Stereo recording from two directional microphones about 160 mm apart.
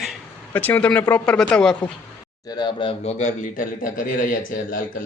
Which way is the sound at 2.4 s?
25° left (ahead or behind).